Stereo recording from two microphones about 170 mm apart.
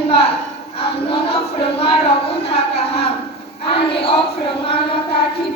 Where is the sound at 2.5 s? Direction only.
35° left (ahead or behind).